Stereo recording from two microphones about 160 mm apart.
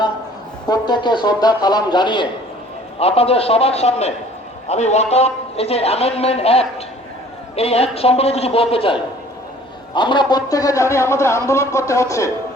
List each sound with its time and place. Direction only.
0.7 s a man's voice: 25° left (ahead or behind)